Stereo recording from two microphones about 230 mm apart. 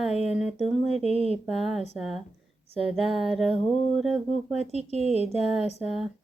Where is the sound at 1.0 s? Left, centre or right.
Right.